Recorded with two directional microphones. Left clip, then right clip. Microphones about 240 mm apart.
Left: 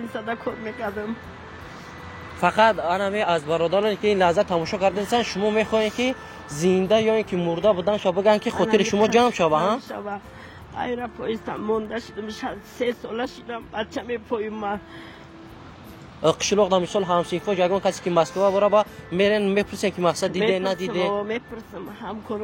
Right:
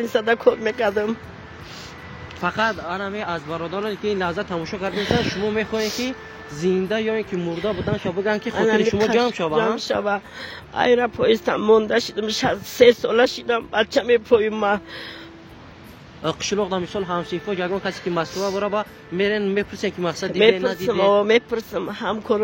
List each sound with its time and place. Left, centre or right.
0.1 s a man's voice: right
2.4 s speech: centre
9.8 s a man's voice: right
16.2 s speech: centre
21.1 s a man's voice: right